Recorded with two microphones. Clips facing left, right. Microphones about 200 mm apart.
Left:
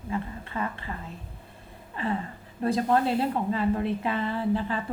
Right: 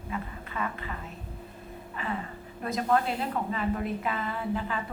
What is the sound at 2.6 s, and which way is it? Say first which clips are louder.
A woman's voice: left 3 dB; 30° left (ahead or behind).